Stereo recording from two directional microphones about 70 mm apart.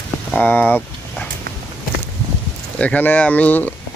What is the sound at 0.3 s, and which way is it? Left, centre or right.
Speech, left.